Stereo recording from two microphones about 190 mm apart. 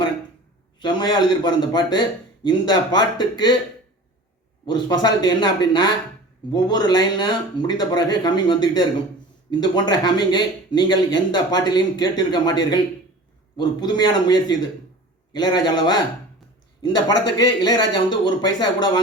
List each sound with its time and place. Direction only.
0.8 s speech: 20° left (ahead or behind)
4.6 s speech: 20° left (ahead or behind)